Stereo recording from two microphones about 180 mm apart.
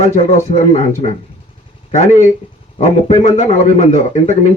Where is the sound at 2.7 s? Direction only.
40° left (ahead or behind).